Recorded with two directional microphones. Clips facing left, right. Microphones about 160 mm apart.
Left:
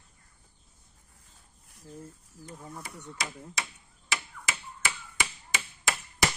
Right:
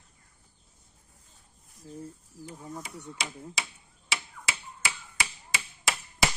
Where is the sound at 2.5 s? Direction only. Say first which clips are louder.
Right 2 dB; 5° right (ahead or behind).